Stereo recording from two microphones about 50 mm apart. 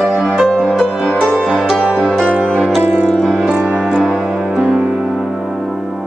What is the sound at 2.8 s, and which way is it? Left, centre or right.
Music, right.